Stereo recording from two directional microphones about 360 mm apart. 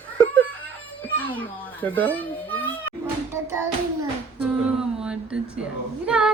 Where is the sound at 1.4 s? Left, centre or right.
Centre.